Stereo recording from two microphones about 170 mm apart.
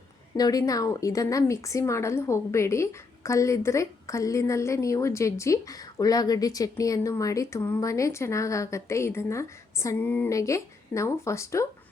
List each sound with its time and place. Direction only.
0.3 s a woman's voice: 20° left (ahead or behind)